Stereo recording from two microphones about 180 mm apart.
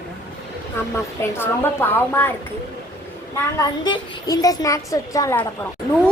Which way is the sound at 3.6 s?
25° left (ahead or behind).